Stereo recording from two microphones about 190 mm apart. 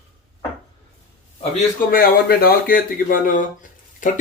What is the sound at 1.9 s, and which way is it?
Speech, 50° left (ahead or behind).